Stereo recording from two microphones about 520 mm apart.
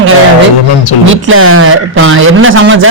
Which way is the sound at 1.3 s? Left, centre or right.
Right.